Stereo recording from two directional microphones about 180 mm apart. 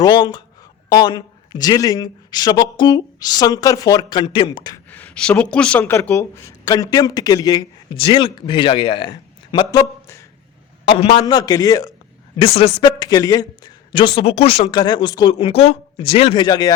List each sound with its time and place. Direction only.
0.0 s speech: 25° left (ahead or behind)
4.9 s speech: 10° left (ahead or behind)
10.8 s speech: 35° left (ahead or behind)
11.3 s speech: 20° left (ahead or behind)
12.4 s speech: 30° left (ahead or behind)